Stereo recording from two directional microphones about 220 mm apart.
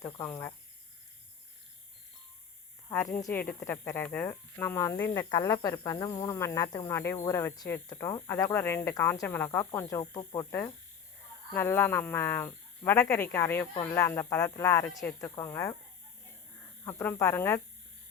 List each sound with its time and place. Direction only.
0.0 s speech: 15° left (ahead or behind)
2.9 s speech: 15° left (ahead or behind)
16.8 s speech: 10° left (ahead or behind)